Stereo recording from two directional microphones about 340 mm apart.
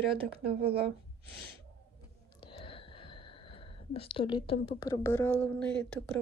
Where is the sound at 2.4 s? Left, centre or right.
Centre.